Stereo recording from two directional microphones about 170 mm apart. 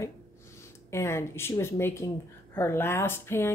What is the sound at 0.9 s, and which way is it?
Speech, 15° left (ahead or behind).